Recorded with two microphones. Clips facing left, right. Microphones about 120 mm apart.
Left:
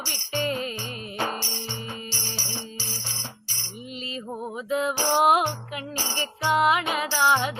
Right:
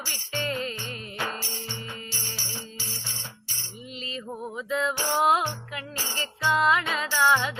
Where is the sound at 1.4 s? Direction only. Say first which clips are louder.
Left 3 dB; 30° left (ahead or behind).